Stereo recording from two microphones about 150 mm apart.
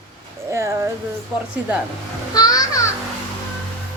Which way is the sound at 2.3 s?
25° left (ahead or behind).